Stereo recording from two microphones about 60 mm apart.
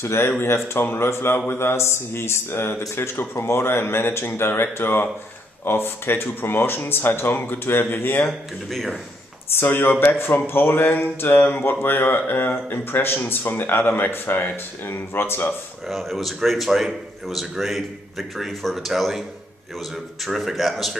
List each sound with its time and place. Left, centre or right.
0.0 s speech: left
8.3 s a man's voice: centre
9.5 s speech: left
15.9 s a man's voice: centre
20.2 s a man's voice: centre